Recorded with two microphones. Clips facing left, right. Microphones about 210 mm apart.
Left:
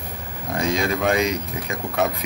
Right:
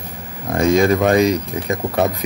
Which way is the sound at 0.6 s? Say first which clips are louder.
Right 8 dB; 50° right (ahead or behind).